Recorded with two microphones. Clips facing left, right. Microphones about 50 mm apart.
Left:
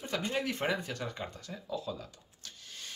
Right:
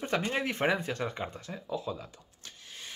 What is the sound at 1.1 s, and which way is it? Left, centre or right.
Speech, right.